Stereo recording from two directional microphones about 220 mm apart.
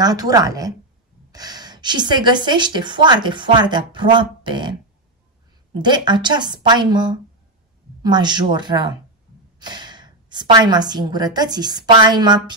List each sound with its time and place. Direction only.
0.0 s a woman's voice: 15° right (ahead or behind)
5.8 s a woman's voice: 20° right (ahead or behind)